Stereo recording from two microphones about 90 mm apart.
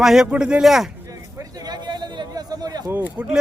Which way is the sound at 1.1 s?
45° right (ahead or behind).